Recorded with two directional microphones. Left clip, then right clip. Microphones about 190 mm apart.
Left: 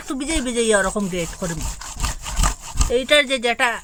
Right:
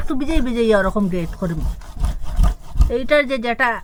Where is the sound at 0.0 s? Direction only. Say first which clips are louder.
Right 2 dB; 25° left (ahead or behind).